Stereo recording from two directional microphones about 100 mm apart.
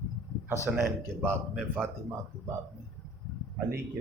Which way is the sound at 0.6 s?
25° right (ahead or behind).